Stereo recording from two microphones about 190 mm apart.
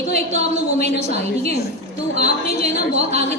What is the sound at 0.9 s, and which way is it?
Speech, 60° left (ahead or behind).